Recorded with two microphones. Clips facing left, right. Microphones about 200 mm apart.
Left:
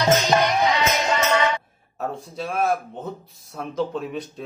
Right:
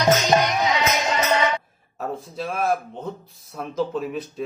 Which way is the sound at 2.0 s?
Centre (ahead or behind).